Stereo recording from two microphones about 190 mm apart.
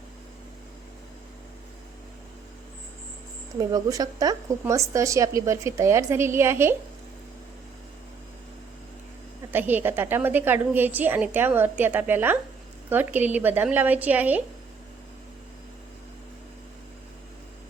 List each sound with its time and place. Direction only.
3.6 s a woman's voice: 20° right (ahead or behind)
9.5 s a woman's voice: 10° right (ahead or behind)